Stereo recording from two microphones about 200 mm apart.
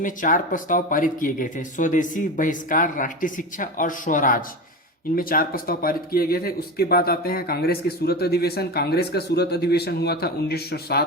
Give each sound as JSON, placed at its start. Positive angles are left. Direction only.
{"t": 0.0, "sound": "speech", "side_deg": 40}